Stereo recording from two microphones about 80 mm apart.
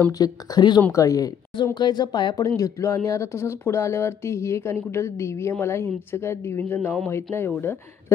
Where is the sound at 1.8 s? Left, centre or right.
Left.